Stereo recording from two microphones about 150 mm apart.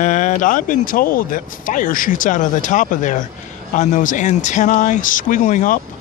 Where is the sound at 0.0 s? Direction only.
55° left (ahead or behind).